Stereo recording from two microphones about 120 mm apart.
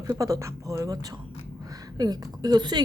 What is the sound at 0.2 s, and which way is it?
Speech, 25° right (ahead or behind).